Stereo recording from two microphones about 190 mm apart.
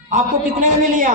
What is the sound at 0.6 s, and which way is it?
Speech, 40° right (ahead or behind).